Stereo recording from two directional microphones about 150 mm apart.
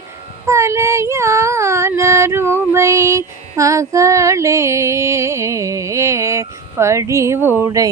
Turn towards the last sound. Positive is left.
turn(degrees=-20)  # may be behind; listen again after turning